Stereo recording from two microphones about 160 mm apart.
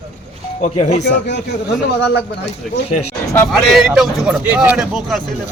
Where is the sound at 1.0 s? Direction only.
90° left.